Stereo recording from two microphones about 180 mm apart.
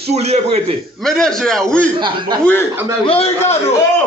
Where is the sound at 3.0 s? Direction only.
35° left (ahead or behind).